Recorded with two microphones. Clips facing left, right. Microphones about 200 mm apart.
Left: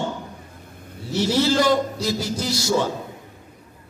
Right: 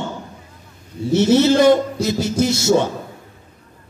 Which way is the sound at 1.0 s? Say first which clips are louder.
Right 7 dB; 25° right (ahead or behind).